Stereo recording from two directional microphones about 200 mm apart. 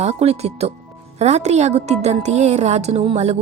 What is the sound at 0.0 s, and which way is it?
A woman's voice, 30° right (ahead or behind).